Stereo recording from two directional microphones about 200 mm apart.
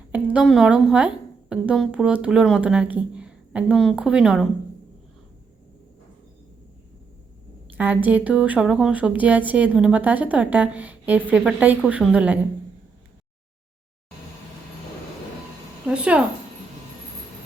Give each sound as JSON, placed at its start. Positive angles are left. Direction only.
{"t": 0.1, "sound": "a woman's voice", "side_deg": -5}
{"t": 7.8, "sound": "speech", "side_deg": -10}
{"t": 15.9, "sound": "speech", "side_deg": -5}